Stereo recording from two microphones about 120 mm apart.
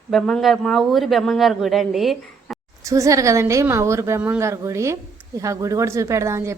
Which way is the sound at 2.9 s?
25° right (ahead or behind).